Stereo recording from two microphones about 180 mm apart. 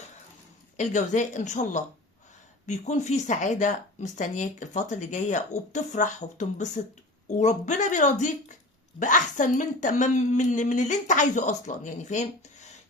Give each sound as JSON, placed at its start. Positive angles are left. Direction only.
{"t": 0.8, "sound": "a woman's voice", "side_deg": 45}